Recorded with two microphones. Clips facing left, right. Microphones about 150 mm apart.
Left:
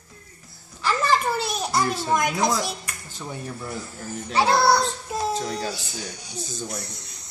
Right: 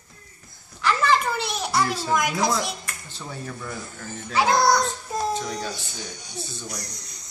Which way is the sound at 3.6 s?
30° left (ahead or behind).